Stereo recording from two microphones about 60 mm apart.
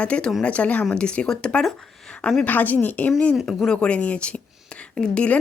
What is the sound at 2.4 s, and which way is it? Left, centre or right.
Speech, left.